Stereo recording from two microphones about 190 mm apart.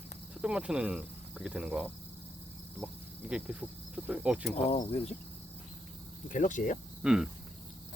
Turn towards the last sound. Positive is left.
turn(degrees=-5)  # may be behind; listen again after turning